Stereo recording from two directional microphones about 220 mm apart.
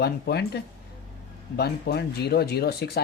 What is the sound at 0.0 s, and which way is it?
Speech, 45° left (ahead or behind).